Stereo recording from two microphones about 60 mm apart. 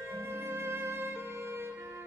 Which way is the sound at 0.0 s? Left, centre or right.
Right.